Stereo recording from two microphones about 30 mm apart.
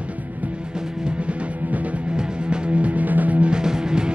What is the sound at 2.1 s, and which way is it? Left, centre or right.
Music, right.